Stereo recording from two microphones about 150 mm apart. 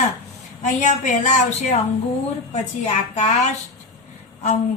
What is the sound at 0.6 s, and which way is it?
Speech, 55° left (ahead or behind).